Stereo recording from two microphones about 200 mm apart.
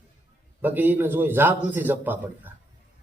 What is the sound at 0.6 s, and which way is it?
A man's voice, 10° right (ahead or behind).